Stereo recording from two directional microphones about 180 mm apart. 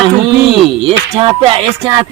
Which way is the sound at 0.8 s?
30° right (ahead or behind).